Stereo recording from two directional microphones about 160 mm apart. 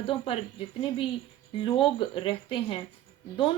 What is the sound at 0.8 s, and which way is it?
A woman's voice, 30° left (ahead or behind).